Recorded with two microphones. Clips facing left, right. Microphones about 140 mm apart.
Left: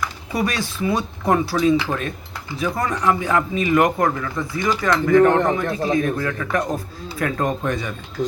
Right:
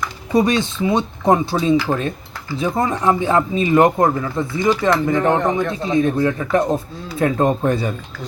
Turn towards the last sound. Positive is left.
turn(degrees=-30)  # may be behind; listen again after turning